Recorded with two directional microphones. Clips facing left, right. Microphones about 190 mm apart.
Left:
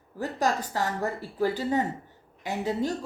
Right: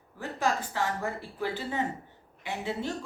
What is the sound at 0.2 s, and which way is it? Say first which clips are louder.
Speech: left 3 dB; 40° left (ahead or behind).